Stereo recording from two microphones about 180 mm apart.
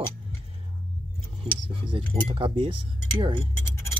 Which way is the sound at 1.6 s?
25° right (ahead or behind).